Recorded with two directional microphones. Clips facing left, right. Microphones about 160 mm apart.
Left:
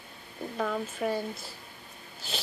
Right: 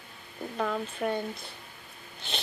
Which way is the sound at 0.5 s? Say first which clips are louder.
Even; centre (ahead or behind).